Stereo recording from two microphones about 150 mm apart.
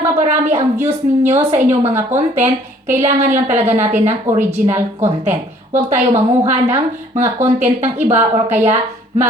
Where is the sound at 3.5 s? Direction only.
15° right (ahead or behind).